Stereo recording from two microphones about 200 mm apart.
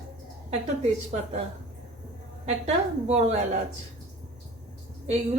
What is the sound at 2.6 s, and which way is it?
Speech, 35° right (ahead or behind).